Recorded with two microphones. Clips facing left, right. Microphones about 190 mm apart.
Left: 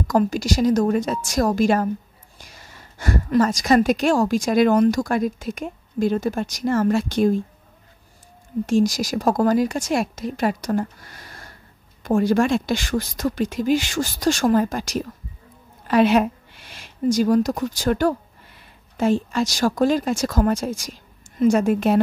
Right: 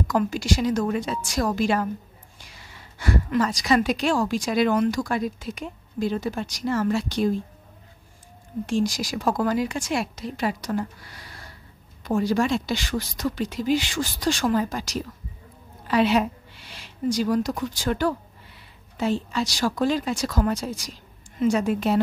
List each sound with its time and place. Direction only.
0.1 s speech: 40° left (ahead or behind)
8.6 s speech: 45° left (ahead or behind)